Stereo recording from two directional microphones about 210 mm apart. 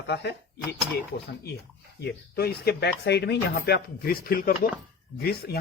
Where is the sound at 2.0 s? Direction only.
50° left (ahead or behind).